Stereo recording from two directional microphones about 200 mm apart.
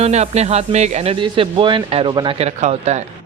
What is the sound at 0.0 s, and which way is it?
Speech, 35° right (ahead or behind).